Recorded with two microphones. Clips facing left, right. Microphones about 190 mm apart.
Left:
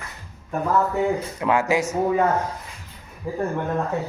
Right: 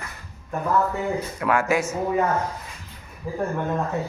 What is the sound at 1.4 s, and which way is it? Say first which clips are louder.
Speech: left 1 dB; 20° left (ahead or behind).